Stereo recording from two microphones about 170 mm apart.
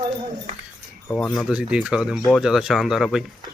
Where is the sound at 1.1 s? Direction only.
5° left (ahead or behind).